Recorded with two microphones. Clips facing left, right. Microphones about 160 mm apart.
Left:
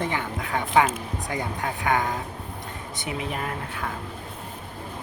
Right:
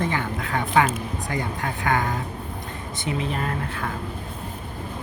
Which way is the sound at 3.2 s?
15° left (ahead or behind).